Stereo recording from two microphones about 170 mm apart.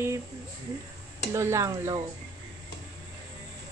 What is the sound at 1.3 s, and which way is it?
Speech, 15° right (ahead or behind).